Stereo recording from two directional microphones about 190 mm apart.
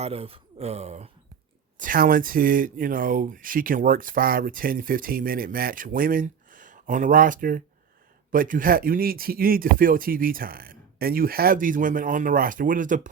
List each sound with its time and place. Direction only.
0.0 s speech: 30° right (ahead or behind)
1.8 s speech: 50° right (ahead or behind)